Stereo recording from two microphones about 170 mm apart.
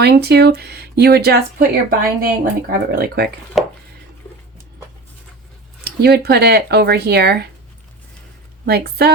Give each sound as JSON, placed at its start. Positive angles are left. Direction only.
{"t": 0.0, "sound": "speech", "side_deg": -70}
{"t": 3.6, "sound": "a sound", "side_deg": 0}
{"t": 5.8, "sound": "speech", "side_deg": -70}
{"t": 8.6, "sound": "speech", "side_deg": -70}